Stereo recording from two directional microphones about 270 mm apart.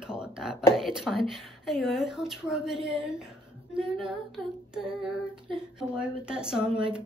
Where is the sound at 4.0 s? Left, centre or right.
Centre.